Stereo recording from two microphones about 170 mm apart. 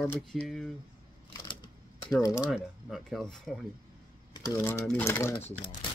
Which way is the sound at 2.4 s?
5° right (ahead or behind).